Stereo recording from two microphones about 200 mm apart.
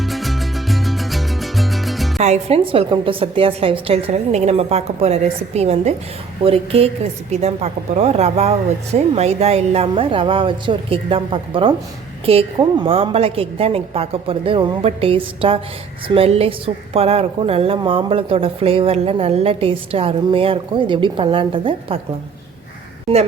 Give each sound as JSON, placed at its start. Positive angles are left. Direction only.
{"t": 0.0, "sound": "music", "side_deg": 0}
{"t": 2.2, "sound": "a woman's voice", "side_deg": -30}